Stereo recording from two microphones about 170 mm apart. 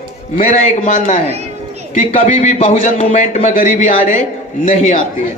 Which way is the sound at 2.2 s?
45° left (ahead or behind).